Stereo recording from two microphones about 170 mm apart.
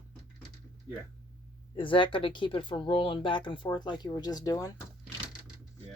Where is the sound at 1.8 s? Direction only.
30° left (ahead or behind).